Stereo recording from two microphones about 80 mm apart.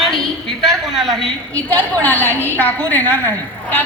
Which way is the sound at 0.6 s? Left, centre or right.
Centre.